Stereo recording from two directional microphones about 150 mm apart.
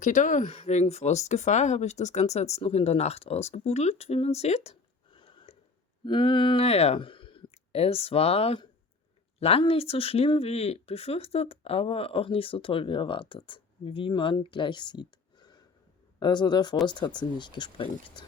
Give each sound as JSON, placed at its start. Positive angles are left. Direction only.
{"t": 0.0, "sound": "speech", "side_deg": 60}
{"t": 0.5, "sound": "speech", "side_deg": 45}